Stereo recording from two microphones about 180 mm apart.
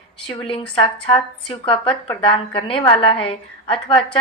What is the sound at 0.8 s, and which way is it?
A woman's voice, 30° left (ahead or behind).